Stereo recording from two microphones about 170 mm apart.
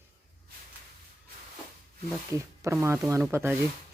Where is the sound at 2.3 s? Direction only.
15° right (ahead or behind).